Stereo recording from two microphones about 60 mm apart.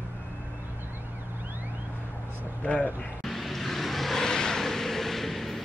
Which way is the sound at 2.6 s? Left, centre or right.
Left.